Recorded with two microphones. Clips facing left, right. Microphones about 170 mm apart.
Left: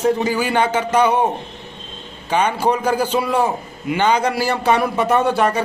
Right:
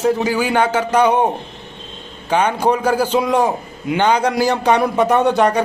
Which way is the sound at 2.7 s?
10° right (ahead or behind).